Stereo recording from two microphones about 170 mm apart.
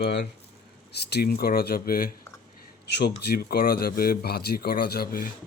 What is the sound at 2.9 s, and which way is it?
A man's voice, 75° left (ahead or behind).